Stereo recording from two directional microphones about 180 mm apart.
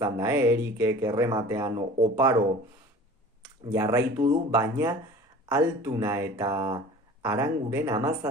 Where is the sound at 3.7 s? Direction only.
15° right (ahead or behind).